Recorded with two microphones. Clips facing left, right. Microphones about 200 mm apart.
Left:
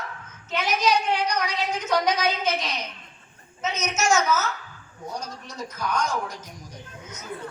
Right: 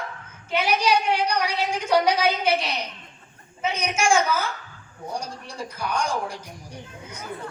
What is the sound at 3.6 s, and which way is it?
Speech, 10° right (ahead or behind).